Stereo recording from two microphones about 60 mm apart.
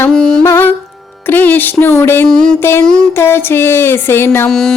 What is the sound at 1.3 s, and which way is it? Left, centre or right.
Music, left.